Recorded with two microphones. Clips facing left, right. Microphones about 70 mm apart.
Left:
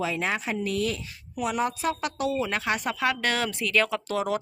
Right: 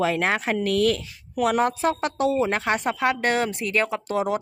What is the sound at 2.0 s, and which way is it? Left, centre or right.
Speech, right.